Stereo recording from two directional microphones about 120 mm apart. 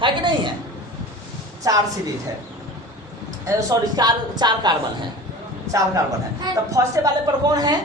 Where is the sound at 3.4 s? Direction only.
25° right (ahead or behind).